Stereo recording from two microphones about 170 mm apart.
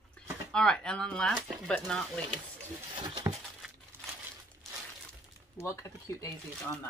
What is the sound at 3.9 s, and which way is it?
Crumpling, 10° right (ahead or behind).